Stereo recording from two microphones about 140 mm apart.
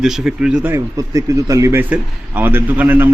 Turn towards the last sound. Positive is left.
turn(degrees=-15)  # may be behind; listen again after turning